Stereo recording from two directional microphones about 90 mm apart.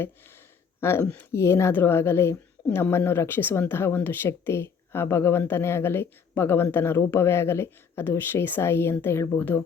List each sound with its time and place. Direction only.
0.8 s speech: 30° left (ahead or behind)